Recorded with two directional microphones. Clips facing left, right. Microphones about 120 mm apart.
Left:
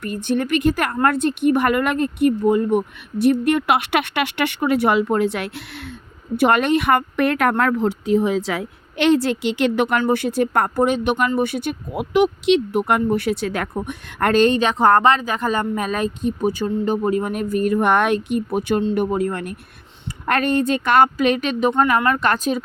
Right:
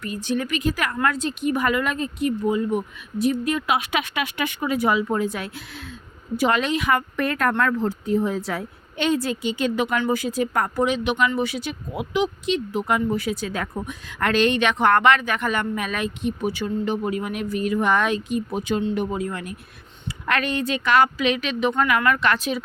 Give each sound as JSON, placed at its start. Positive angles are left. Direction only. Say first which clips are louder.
{"t": 0.0, "sound": "speech", "louder": "left 4 dB", "side_deg": 55}
{"t": 6.3, "sound": "a woman's voice", "louder": "left 5 dB", "side_deg": 60}
{"t": 13.8, "sound": "a woman's voice", "louder": "left 4 dB", "side_deg": 55}
{"t": 21.7, "sound": "speech", "louder": "left 3 dB", "side_deg": 35}
{"t": 22.2, "sound": "a woman's voice", "louder": "left 3 dB", "side_deg": 45}